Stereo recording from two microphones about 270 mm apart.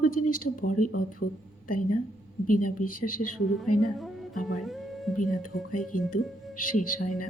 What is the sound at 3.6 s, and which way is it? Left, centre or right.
Speech, left.